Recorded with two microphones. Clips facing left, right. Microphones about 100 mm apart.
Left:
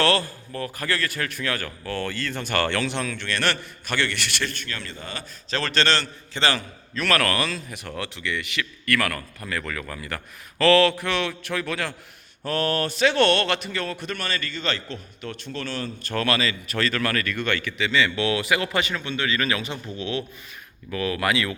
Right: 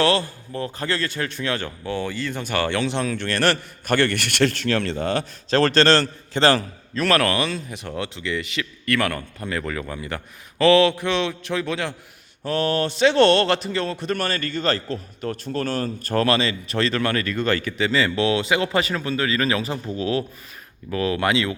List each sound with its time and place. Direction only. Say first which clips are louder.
0.0 s a man's voice: right 2 dB; 20° right (ahead or behind)
2.8 s a man's voice: right 4 dB; 30° right (ahead or behind)
3.2 s a man's voice: right 5 dB; 40° right (ahead or behind); by 5.2 s 65° right (ahead or behind)
5.5 s a man's voice: right 7 dB; 50° right (ahead or behind); by 14.2 s 30° right (ahead or behind)
14.2 s a man's voice: right 5 dB; 45° right (ahead or behind); by 21.5 s 25° right (ahead or behind)